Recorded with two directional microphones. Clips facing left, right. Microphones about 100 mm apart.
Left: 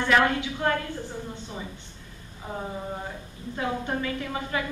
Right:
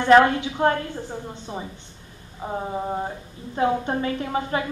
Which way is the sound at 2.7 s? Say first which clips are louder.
Right 7 dB; 35° right (ahead or behind).